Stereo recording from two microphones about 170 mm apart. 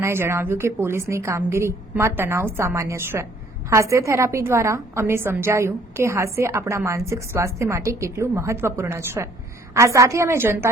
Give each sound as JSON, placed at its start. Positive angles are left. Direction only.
{"t": 0.0, "sound": "a woman's voice", "side_deg": -15}